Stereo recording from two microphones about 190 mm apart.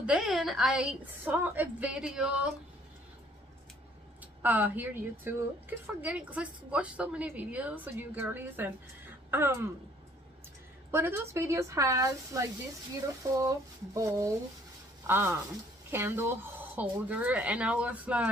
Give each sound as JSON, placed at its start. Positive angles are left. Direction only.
{"t": 0.0, "sound": "a woman's voice", "side_deg": -5}
{"t": 4.4, "sound": "a woman's voice", "side_deg": -10}
{"t": 10.9, "sound": "a woman's voice", "side_deg": -10}